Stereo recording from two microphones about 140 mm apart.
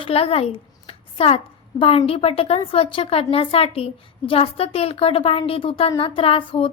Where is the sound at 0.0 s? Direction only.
45° left (ahead or behind).